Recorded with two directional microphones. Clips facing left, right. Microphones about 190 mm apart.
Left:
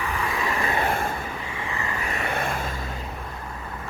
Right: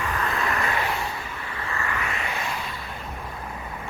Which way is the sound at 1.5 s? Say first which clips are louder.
Right 2 dB; 15° left (ahead or behind).